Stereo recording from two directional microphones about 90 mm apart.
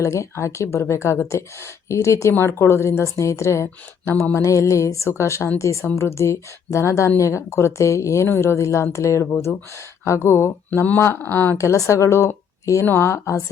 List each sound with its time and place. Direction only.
0.0 s speech: 35° left (ahead or behind)
11.5 s speech: 35° left (ahead or behind)